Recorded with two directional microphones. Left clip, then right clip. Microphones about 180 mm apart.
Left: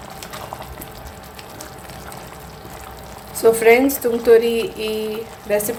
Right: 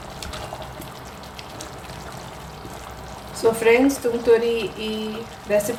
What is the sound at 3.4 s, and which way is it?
A woman's voice, 30° left (ahead or behind).